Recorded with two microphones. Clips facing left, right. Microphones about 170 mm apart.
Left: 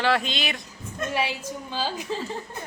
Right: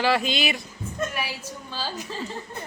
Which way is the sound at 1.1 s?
25° left (ahead or behind).